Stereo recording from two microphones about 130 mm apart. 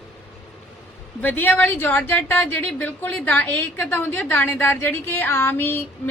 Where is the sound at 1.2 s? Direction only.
15° left (ahead or behind).